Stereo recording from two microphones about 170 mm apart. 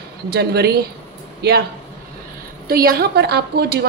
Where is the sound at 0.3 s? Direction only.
70° right (ahead or behind).